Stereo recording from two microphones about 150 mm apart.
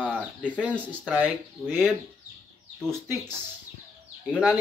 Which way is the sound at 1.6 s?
5° left (ahead or behind).